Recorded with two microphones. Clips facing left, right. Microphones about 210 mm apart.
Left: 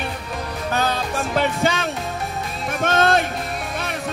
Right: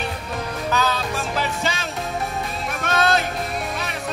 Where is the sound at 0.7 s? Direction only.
55° left (ahead or behind).